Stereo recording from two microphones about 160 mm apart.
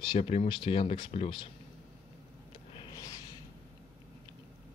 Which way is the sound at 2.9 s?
20° left (ahead or behind).